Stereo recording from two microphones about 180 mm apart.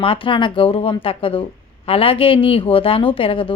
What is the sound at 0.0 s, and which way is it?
Speech, 30° left (ahead or behind).